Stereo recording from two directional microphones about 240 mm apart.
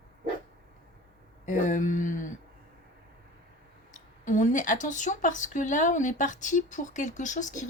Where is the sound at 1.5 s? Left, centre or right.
Left.